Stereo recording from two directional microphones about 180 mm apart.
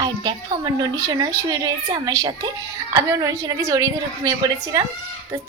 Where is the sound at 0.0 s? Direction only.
25° right (ahead or behind).